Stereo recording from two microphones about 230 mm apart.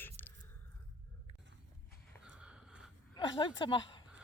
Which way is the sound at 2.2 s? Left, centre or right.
Centre.